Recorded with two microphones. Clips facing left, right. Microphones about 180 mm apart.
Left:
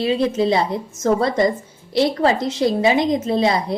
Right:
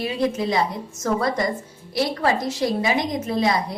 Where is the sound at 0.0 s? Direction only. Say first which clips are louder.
Left 5 dB; 25° left (ahead or behind).